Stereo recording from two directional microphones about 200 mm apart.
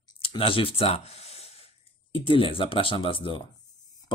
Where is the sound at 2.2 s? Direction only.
25° left (ahead or behind).